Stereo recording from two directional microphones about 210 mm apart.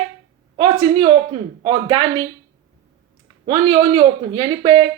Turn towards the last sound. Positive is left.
turn(degrees=-25)  # may be behind; listen again after turning